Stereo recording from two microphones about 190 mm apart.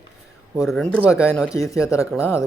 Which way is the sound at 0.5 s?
Centre (ahead or behind).